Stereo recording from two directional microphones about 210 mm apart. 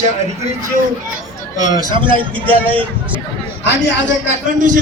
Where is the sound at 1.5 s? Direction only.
20° right (ahead or behind).